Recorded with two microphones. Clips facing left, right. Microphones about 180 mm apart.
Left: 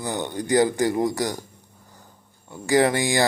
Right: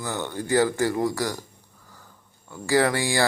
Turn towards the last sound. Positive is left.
turn(degrees=20)  # may be behind; listen again after turning